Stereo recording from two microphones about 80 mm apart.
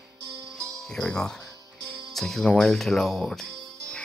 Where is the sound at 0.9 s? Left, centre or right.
Centre.